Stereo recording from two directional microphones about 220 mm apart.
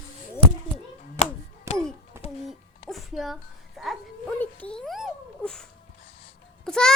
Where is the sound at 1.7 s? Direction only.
15° right (ahead or behind).